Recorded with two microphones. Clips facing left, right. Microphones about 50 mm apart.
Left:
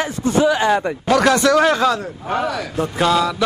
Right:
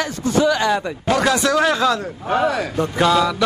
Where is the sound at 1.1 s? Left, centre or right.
Left.